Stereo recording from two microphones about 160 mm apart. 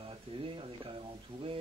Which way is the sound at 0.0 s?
35° right (ahead or behind).